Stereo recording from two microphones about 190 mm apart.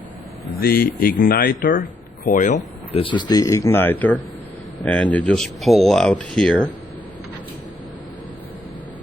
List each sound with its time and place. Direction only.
0.6 s speech: 55° left (ahead or behind); by 6.6 s 5° left (ahead or behind)